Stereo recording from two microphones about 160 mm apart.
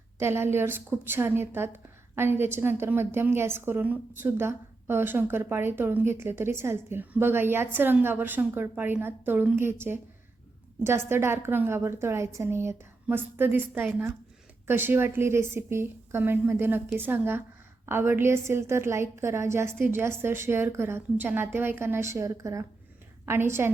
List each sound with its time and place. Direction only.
0.2 s a woman's voice: 15° right (ahead or behind)